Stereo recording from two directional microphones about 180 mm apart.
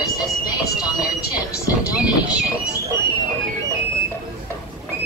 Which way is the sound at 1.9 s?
5° right (ahead or behind).